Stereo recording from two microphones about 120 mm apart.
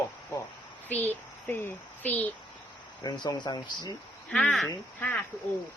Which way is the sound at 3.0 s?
35° left (ahead or behind).